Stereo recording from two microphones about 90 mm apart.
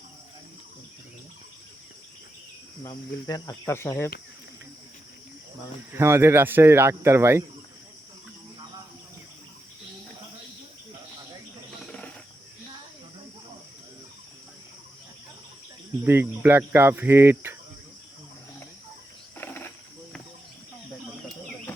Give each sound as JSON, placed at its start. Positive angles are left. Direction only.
{"t": 3.2, "sound": "speech", "side_deg": 45}
{"t": 3.7, "sound": "speech", "side_deg": 30}
{"t": 5.9, "sound": "cricket", "side_deg": -30}
{"t": 11.8, "sound": "wild animals", "side_deg": 10}
{"t": 16.0, "sound": "cricket", "side_deg": -25}
{"t": 19.4, "sound": "cricket", "side_deg": 25}